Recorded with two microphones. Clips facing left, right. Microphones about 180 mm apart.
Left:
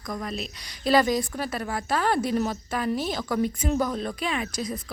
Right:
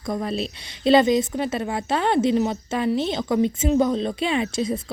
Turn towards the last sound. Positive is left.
turn(degrees=-25)  # may be behind; listen again after turning